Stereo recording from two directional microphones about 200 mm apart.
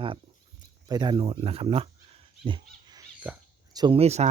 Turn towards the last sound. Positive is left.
turn(degrees=-30)  # may be behind; listen again after turning